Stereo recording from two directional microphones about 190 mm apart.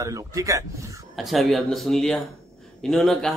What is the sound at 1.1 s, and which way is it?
Speech, centre (ahead or behind).